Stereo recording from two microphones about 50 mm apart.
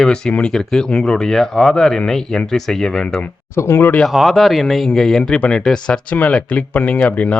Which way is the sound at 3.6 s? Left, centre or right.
Left.